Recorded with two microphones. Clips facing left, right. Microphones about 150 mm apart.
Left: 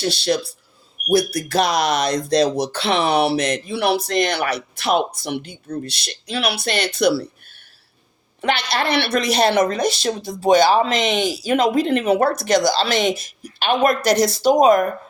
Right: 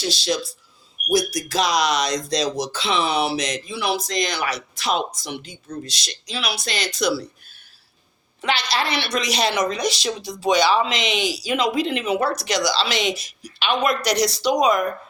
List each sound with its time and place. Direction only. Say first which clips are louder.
0.0 s speech: left 4 dB; 60° left (ahead or behind)